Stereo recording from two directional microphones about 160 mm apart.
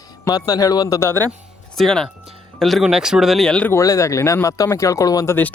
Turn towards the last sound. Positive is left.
turn(degrees=15)  # may be behind; listen again after turning